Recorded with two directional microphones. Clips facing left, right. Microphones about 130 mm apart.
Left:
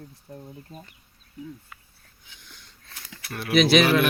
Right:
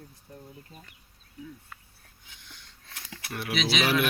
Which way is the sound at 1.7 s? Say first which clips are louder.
Even; 5° left (ahead or behind).